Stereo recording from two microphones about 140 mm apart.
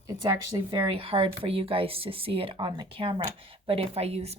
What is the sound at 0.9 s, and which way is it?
Speech, 40° right (ahead or behind).